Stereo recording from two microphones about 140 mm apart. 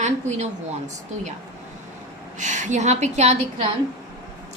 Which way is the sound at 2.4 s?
60° right (ahead or behind).